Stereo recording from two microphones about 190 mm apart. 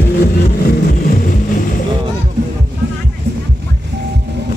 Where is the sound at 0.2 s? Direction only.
55° left (ahead or behind).